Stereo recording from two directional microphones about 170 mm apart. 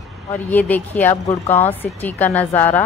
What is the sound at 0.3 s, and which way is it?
Speech, 10° left (ahead or behind).